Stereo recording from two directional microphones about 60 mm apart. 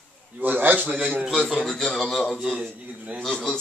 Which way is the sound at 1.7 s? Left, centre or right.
Centre.